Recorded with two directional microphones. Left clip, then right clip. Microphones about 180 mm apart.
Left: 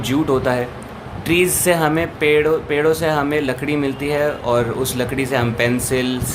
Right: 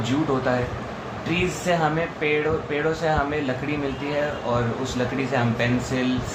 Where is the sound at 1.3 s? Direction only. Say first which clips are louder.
Left 8 dB; 65° left (ahead or behind).